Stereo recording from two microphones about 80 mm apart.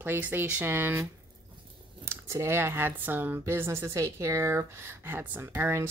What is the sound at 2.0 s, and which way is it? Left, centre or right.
Speech, right.